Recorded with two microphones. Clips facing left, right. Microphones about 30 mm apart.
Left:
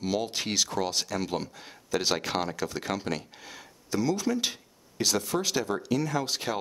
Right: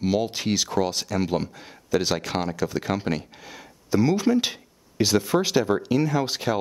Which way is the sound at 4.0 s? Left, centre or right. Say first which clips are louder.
Right 6 dB; right.